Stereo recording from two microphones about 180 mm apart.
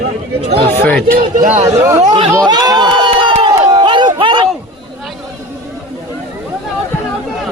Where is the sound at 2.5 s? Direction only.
20° right (ahead or behind).